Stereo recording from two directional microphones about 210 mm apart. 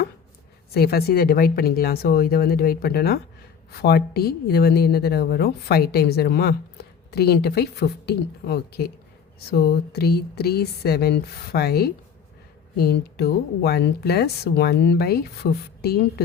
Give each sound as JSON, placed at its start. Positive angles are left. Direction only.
{"t": 0.7, "sound": "a woman's voice", "side_deg": 50}